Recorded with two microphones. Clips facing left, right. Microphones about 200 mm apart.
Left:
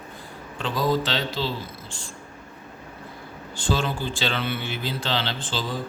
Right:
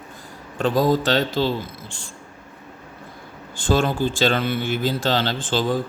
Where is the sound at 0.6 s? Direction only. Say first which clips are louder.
Right 5 dB; 45° right (ahead or behind).